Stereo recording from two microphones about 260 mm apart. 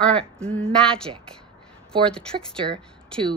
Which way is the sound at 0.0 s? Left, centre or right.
Centre.